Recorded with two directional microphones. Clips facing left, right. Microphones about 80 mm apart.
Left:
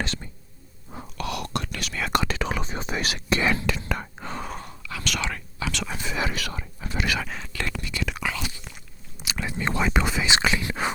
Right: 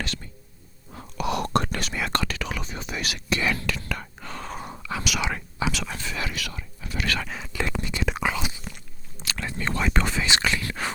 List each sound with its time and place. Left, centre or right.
0.0 s whispering: left
1.3 s whispering: right
2.1 s whispering: left
4.6 s whispering: right
5.0 s speech: centre
5.3 s whispering: centre
5.7 s speech: centre
6.0 s whispering: left
6.3 s whispering: left
6.9 s dog: centre
7.2 s speech: centre
7.5 s whispering: right
9.2 s speech: centre